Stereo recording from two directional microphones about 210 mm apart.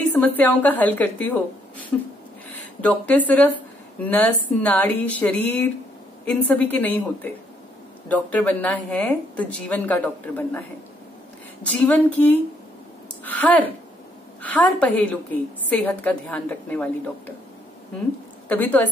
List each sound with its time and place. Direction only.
0.1 s a woman's voice: 10° left (ahead or behind)
2.8 s a woman's voice: 5° left (ahead or behind)
11.6 s a woman's voice: 5° left (ahead or behind)
18.5 s a woman's voice: 10° left (ahead or behind)